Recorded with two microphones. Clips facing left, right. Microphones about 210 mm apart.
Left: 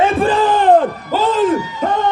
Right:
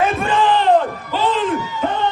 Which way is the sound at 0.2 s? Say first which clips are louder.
Left 3 dB; 35° left (ahead or behind).